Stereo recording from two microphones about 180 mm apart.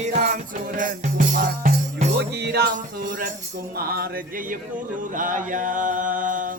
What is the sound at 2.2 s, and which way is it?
Music, 65° right (ahead or behind).